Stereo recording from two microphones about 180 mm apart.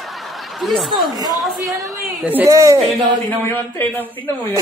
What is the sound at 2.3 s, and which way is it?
Speech, 15° right (ahead or behind).